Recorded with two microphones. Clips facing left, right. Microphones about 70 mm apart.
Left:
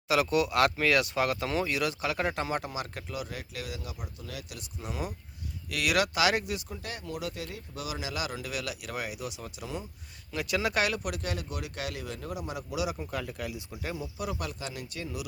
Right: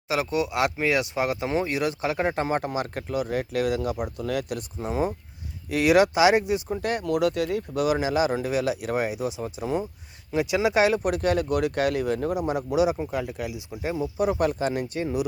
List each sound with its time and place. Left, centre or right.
0.1 s speech: right
4.8 s speech: right
6.7 s speech: right
7.1 s speech: right
7.7 s speech: right
8.1 s speech: right
10.3 s speech: centre
11.0 s speech: right
13.1 s speech: centre
14.0 s speech: right